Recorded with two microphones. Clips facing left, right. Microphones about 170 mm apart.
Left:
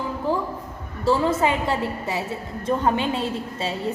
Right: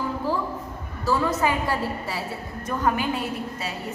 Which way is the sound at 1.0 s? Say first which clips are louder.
Left 3 dB; 25° left (ahead or behind).